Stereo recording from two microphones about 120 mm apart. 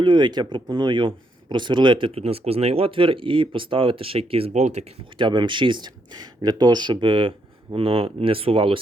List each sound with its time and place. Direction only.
0.0 s speech: 40° right (ahead or behind); by 4.9 s 65° right (ahead or behind)
5.1 s speech: 40° right (ahead or behind)